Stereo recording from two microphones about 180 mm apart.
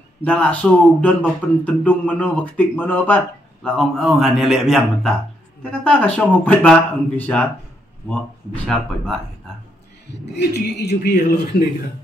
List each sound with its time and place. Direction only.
0.2 s a man's voice: 5° left (ahead or behind)
10.3 s a man's voice: 70° left (ahead or behind)